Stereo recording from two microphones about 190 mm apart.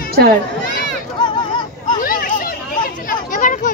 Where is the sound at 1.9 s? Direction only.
45° left (ahead or behind).